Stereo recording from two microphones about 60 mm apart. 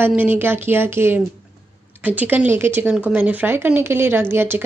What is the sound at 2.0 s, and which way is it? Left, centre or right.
Speech, right.